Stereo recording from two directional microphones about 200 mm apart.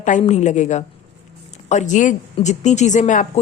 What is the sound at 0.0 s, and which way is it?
Speech, 35° left (ahead or behind).